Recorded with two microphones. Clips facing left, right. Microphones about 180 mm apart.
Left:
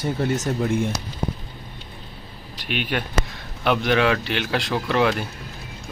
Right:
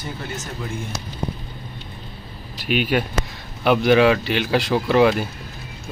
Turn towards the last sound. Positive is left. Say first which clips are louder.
# right 5 dB
turn(degrees=-5)  # may be behind; listen again after turning